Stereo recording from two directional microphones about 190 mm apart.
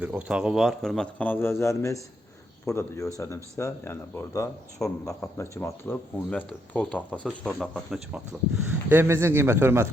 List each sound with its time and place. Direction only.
0.0 s a man's voice: 5° right (ahead or behind)